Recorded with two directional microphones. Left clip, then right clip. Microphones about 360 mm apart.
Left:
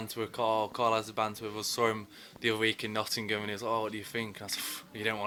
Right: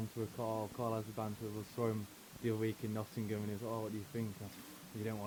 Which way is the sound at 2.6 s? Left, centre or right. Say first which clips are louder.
Left 10 dB; centre.